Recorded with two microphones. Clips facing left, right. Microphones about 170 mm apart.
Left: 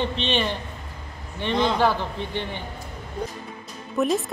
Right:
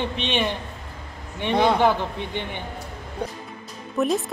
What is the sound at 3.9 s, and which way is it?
Speech, centre (ahead or behind).